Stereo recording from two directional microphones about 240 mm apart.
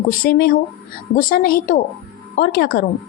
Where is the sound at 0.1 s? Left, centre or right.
Left.